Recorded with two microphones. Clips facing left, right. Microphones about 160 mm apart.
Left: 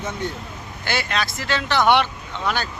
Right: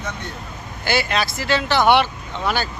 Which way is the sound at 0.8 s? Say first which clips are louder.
Right 4 dB; 5° right (ahead or behind).